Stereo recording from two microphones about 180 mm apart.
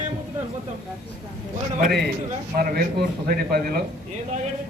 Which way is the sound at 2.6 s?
60° right (ahead or behind).